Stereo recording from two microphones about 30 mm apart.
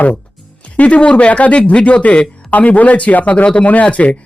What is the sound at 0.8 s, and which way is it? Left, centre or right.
Speech, left.